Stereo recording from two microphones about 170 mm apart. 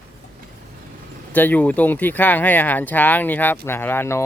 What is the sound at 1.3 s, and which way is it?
Speech, 10° left (ahead or behind).